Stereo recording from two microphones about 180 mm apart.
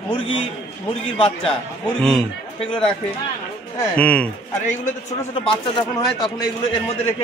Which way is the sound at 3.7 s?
5° left (ahead or behind).